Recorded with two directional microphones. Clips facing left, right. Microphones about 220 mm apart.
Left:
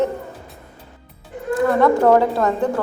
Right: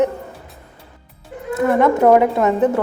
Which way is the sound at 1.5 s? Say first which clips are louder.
Even; 20° right (ahead or behind).